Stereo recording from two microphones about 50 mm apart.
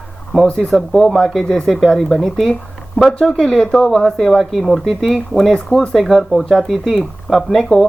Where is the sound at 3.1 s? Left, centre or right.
Centre.